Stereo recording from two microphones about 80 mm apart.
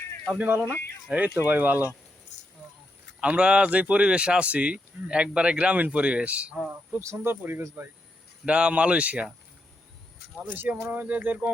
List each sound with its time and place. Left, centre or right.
0.3 s speech: right
0.6 s speech: left
1.4 s speech: right
3.2 s speech: centre
7.0 s speech: right
8.4 s speech: centre
10.5 s speech: right